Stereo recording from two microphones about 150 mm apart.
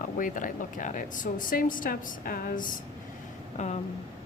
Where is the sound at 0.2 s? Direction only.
65° left (ahead or behind).